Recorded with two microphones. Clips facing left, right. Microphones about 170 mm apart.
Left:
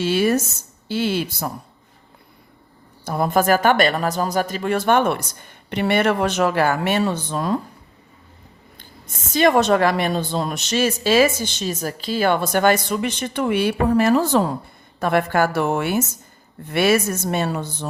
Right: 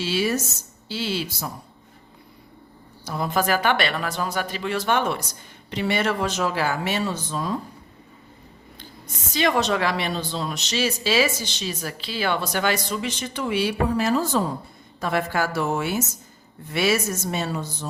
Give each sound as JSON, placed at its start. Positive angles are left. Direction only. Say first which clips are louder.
{"t": 0.0, "sound": "a woman's voice", "louder": "left 5 dB", "side_deg": 55}
{"t": 3.0, "sound": "a woman's voice", "louder": "left 5 dB", "side_deg": 50}
{"t": 8.8, "sound": "a woman's voice", "louder": "even", "side_deg": 50}